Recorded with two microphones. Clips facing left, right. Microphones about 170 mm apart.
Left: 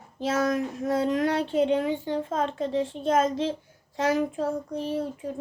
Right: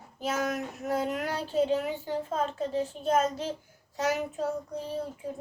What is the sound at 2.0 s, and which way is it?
A woman's voice, 90° left.